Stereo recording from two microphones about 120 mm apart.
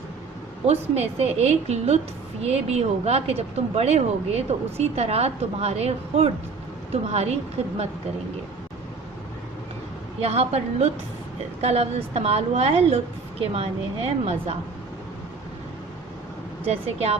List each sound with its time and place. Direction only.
0.7 s speech: 60° right (ahead or behind)
10.2 s speech: 60° right (ahead or behind)
16.6 s speech: 60° right (ahead or behind)